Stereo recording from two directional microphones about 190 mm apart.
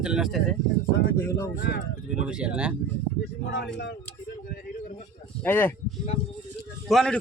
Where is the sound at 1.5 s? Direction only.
60° left (ahead or behind).